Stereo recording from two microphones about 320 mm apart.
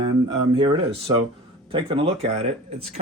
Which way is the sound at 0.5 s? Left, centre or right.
Centre.